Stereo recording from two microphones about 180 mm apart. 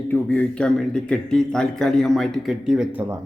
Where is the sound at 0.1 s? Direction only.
10° left (ahead or behind).